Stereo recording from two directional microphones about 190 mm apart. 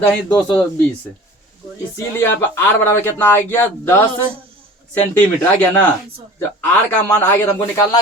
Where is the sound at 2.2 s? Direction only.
15° left (ahead or behind).